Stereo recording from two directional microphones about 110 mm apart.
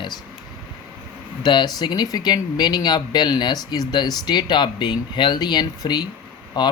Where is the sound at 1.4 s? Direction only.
40° left (ahead or behind).